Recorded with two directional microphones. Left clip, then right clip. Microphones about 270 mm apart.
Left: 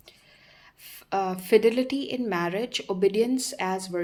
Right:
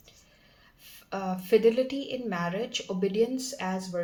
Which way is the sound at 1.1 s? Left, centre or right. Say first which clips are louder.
Left 4 dB; left.